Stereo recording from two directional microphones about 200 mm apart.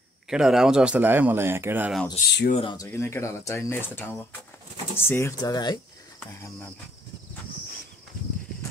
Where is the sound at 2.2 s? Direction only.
35° left (ahead or behind).